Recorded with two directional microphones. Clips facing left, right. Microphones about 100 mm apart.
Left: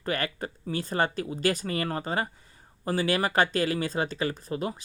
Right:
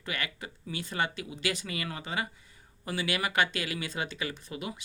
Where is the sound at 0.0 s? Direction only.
40° left (ahead or behind).